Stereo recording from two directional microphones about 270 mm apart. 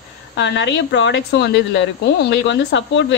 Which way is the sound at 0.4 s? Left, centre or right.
Left.